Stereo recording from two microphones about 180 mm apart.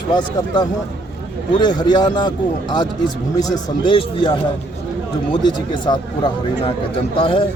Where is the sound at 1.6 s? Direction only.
25° left (ahead or behind).